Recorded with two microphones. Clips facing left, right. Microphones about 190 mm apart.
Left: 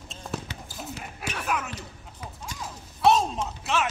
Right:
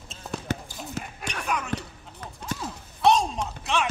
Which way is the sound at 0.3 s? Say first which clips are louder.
Even; 5° left (ahead or behind).